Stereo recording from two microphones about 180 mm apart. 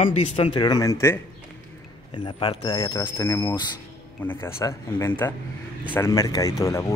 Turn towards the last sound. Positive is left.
turn(degrees=15)  # may be behind; listen again after turning